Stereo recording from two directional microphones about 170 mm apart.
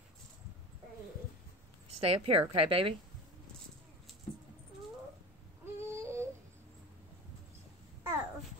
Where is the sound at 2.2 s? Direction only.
35° right (ahead or behind).